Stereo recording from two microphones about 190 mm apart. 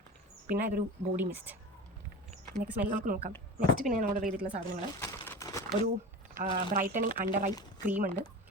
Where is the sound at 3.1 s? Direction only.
45° right (ahead or behind).